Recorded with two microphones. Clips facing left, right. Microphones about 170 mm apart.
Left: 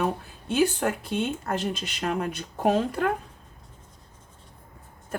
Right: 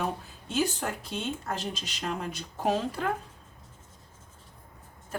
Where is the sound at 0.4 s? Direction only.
60° left (ahead or behind).